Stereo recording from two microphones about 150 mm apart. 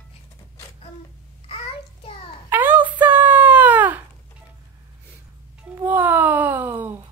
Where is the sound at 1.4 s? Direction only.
40° left (ahead or behind).